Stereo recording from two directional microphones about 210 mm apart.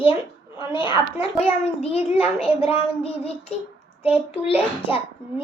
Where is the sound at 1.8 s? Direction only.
30° left (ahead or behind).